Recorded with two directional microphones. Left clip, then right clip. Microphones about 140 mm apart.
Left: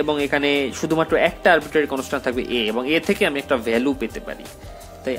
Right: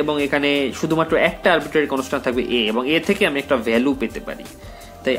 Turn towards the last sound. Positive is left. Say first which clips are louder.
# right 5 dB
turn(degrees=30)  # may be behind; listen again after turning